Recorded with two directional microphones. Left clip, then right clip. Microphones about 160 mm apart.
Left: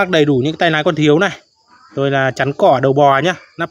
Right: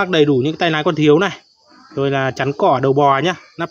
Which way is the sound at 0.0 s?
25° left (ahead or behind).